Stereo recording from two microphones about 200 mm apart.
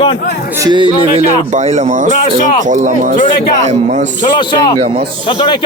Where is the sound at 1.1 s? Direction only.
30° right (ahead or behind).